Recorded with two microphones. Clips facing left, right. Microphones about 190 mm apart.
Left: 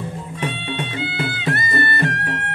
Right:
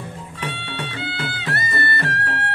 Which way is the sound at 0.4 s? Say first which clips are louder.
Left 4 dB; 20° left (ahead or behind).